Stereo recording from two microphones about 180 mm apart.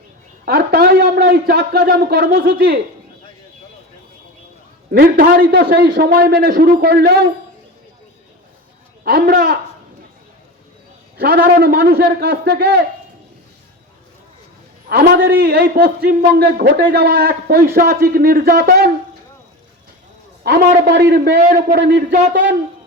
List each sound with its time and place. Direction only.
0.4 s a man's voice: 60° right (ahead or behind)
4.9 s a man's voice: 55° right (ahead or behind)
9.0 s a man's voice: 60° right (ahead or behind)
11.2 s a man's voice: 55° right (ahead or behind)
14.8 s a man's voice: 60° right (ahead or behind)
20.4 s a man's voice: 65° right (ahead or behind)